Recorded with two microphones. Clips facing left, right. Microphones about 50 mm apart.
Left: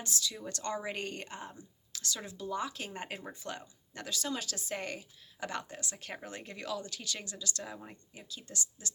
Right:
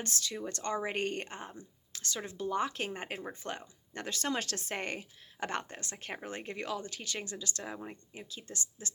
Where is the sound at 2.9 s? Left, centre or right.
Right.